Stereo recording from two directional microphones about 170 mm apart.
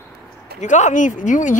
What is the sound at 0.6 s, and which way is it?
Speech, 45° left (ahead or behind).